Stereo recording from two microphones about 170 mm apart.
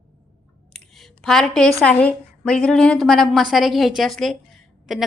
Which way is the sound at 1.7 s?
5° left (ahead or behind).